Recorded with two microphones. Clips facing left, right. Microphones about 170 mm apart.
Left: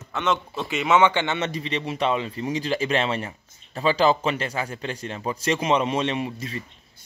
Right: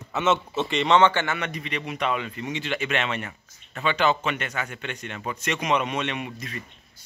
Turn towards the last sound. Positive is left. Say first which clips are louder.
# left 5 dB
turn(degrees=30)  # may be behind; listen again after turning